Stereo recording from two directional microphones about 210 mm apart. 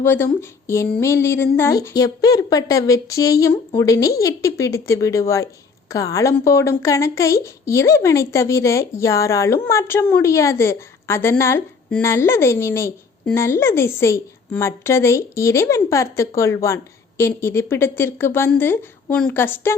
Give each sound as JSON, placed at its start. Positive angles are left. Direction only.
{"t": 0.0, "sound": "a woman's voice", "side_deg": 10}